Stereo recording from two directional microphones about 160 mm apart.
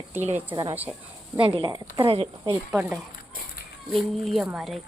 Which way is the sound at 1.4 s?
30° right (ahead or behind).